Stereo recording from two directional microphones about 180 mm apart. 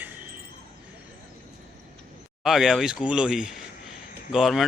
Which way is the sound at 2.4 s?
Centre (ahead or behind).